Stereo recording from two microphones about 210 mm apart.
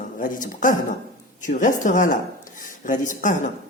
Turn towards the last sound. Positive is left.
turn(degrees=40)  # may be behind; listen again after turning